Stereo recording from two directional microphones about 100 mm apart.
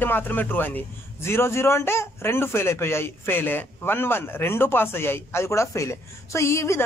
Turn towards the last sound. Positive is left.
turn(degrees=30)  # may be behind; listen again after turning